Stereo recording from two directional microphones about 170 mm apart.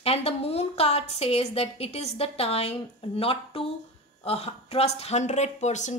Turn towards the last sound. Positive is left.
turn(degrees=45)  # may be behind; listen again after turning